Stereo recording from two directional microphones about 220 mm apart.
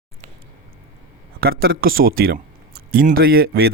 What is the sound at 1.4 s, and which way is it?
Speech, 45° right (ahead or behind).